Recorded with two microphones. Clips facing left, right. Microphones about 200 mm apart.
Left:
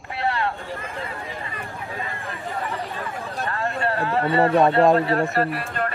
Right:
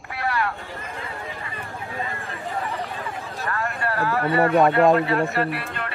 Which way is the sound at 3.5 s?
25° left (ahead or behind).